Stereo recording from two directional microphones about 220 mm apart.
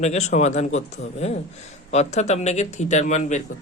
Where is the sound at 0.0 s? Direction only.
30° left (ahead or behind).